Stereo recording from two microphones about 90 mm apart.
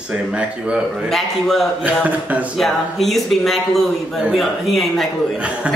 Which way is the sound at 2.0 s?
15° right (ahead or behind).